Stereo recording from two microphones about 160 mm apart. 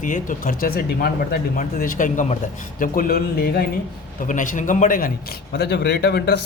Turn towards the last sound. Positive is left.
turn(degrees=90)